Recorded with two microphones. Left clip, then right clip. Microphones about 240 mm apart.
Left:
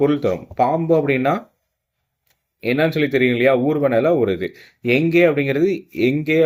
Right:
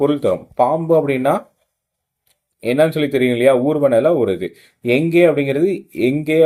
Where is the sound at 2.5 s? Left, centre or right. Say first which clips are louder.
Right 3 dB; centre.